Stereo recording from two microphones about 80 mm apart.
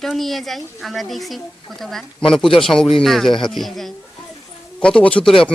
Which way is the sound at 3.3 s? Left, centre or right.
Left.